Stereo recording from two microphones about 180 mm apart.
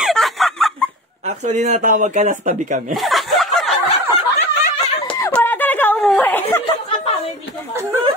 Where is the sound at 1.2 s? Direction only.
40° right (ahead or behind).